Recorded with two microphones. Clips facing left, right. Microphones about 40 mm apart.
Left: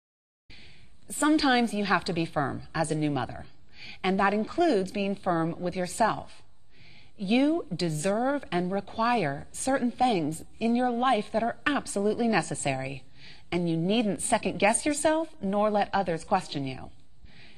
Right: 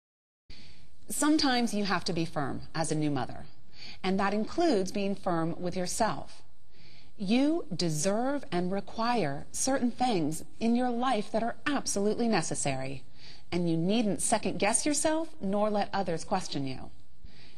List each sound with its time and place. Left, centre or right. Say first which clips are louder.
0.5 s a woman's voice: left 3 dB; left